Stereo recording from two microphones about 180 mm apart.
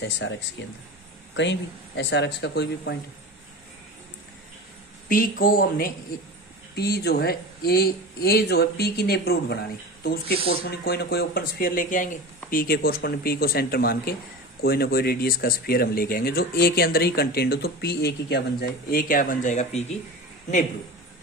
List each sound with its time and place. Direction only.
0.0 s speech: 90° left; by 3.0 s 70° left (ahead or behind)
5.0 s speech: 50° left (ahead or behind)